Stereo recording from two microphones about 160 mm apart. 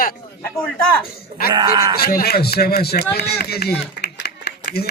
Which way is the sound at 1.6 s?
25° right (ahead or behind).